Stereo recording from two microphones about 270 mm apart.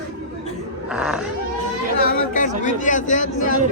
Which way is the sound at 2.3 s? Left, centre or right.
Left.